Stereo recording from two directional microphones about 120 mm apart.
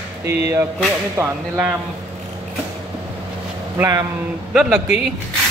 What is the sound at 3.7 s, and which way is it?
Speech, 20° right (ahead or behind).